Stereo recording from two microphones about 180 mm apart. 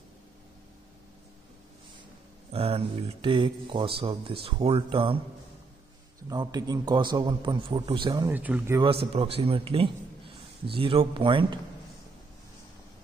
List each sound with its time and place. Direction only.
2.5 s speech: 35° right (ahead or behind)
6.2 s speech: 20° right (ahead or behind)
8.3 s speech: 10° right (ahead or behind)
9.0 s speech: 30° right (ahead or behind)